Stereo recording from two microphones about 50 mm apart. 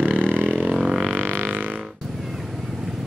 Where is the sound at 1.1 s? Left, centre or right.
Right.